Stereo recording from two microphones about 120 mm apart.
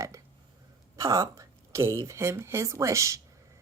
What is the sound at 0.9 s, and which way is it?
Speech, 30° right (ahead or behind).